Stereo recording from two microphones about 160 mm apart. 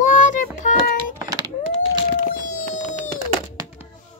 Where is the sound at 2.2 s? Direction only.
50° left (ahead or behind).